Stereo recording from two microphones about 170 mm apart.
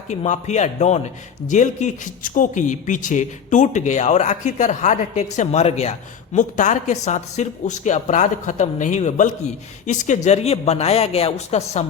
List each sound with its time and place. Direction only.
0.1 s speech: 40° left (ahead or behind)